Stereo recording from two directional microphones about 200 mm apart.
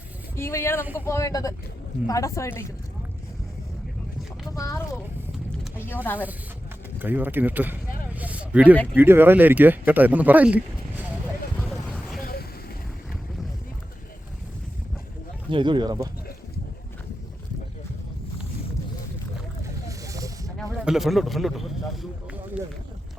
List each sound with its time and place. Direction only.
0.3 s a woman's voice: 15° left (ahead or behind)
4.5 s a woman's voice: 15° left (ahead or behind)
7.0 s speech: 10° right (ahead or behind)
8.7 s a woman's voice: 5° left (ahead or behind)
9.0 s speech: 10° right (ahead or behind)
11.6 s vehicle: 5° right (ahead or behind)
12.2 s vehicle: 50° left (ahead or behind)
15.4 s speech: 25° right (ahead or behind)
19.9 s a sound: 15° right (ahead or behind)
20.8 s a man's voice: centre (ahead or behind)